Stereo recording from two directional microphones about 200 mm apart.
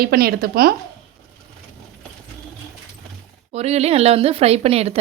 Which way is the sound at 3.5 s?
30° right (ahead or behind).